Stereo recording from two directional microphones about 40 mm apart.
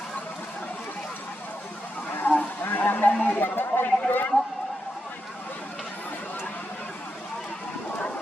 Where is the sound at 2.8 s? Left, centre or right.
Left.